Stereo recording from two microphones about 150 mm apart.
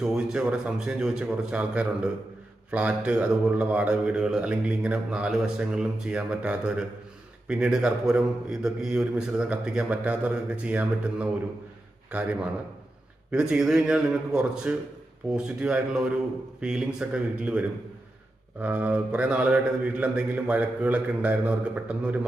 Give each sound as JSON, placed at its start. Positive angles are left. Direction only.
{"t": 0.0, "sound": "a man's voice", "side_deg": -5}
{"t": 13.3, "sound": "a man's voice", "side_deg": -5}